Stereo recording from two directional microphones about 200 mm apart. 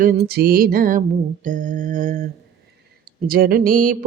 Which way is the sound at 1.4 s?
40° right (ahead or behind).